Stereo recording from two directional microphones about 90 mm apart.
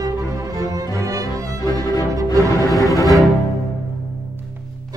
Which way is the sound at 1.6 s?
45° left (ahead or behind).